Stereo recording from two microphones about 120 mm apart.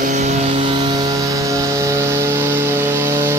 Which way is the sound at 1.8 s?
25° right (ahead or behind).